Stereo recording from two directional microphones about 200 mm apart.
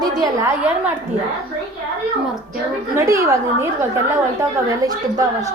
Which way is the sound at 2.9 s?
15° right (ahead or behind).